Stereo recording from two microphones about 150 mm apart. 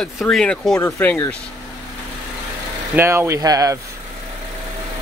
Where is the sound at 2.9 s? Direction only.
15° right (ahead or behind).